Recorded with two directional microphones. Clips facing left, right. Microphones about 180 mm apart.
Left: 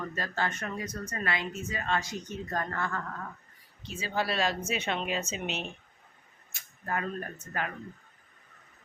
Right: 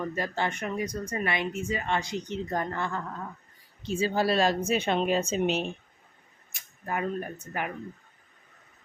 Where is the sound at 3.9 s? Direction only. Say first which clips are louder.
Right 6 dB; 35° right (ahead or behind).